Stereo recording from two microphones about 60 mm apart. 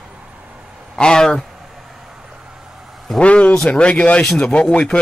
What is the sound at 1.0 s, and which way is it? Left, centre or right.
Speech, centre.